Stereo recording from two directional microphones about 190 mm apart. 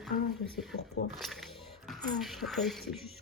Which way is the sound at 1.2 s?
Centre (ahead or behind).